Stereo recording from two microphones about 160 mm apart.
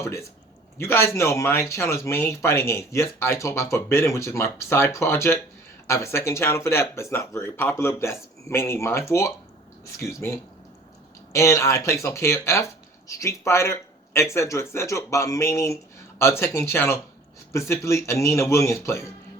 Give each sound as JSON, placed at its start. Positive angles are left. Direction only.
{"t": 0.0, "sound": "speech", "side_deg": 20}